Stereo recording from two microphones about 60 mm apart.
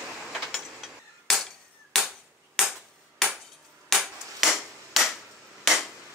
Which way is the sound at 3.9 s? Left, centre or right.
Centre.